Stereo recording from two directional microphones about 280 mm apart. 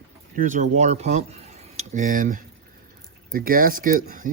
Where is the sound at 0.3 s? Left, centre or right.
Right.